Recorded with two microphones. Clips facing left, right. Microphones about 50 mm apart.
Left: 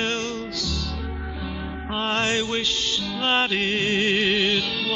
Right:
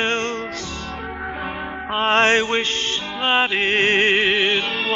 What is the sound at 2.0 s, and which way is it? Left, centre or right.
Music, right.